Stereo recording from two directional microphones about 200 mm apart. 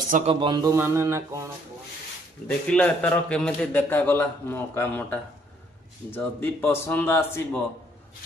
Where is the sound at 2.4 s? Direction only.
5° left (ahead or behind).